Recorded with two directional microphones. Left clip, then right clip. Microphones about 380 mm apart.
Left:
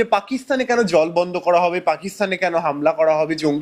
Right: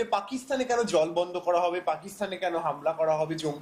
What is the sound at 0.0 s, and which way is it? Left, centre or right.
Speech, left.